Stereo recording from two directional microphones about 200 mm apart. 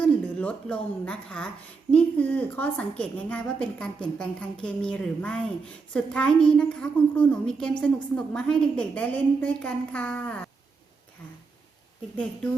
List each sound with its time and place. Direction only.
0.0 s a woman's voice: 5° left (ahead or behind)